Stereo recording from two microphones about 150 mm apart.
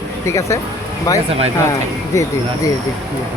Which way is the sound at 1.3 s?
40° right (ahead or behind).